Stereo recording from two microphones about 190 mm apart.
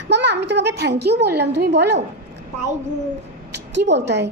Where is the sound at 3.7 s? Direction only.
65° right (ahead or behind).